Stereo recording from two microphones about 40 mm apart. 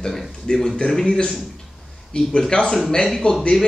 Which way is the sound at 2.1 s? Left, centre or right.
Left.